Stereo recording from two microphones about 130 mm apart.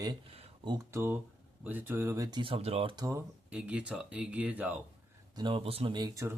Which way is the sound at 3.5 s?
10° right (ahead or behind).